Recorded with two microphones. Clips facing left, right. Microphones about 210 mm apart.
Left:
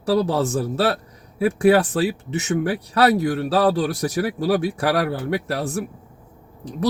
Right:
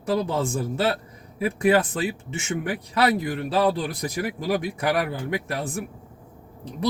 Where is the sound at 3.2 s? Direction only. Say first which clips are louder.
Left 4 dB; 75° left (ahead or behind).